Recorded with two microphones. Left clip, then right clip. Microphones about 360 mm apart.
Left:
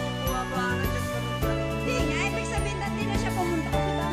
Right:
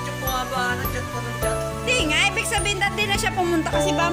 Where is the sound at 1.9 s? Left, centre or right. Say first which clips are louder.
Right 10 dB; left.